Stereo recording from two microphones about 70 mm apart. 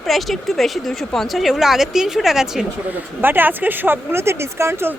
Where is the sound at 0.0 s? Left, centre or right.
Centre.